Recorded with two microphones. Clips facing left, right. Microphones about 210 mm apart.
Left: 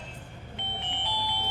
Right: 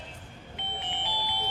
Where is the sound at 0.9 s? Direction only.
5° right (ahead or behind).